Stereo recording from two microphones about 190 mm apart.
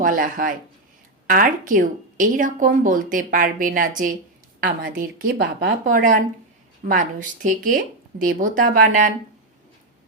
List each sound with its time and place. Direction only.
0.0 s speech: 45° right (ahead or behind)